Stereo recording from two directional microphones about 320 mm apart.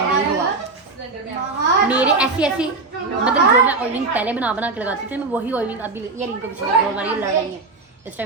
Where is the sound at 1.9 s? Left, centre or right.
Centre.